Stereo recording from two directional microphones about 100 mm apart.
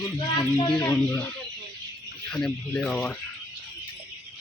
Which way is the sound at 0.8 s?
35° left (ahead or behind).